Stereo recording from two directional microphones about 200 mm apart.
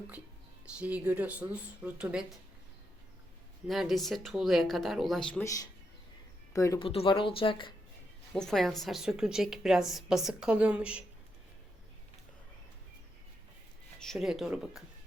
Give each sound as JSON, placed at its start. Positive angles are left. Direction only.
{"t": 0.8, "sound": "speech", "side_deg": -5}
{"t": 3.7, "sound": "a woman's voice", "side_deg": 0}
{"t": 6.5, "sound": "speech", "side_deg": 15}
{"t": 6.8, "sound": "speech", "side_deg": 25}
{"t": 8.3, "sound": "a woman's voice", "side_deg": 0}
{"t": 14.0, "sound": "a woman's voice", "side_deg": 0}